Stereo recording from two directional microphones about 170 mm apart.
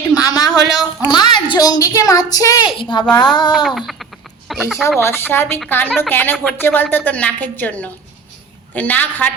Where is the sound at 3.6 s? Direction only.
Centre (ahead or behind).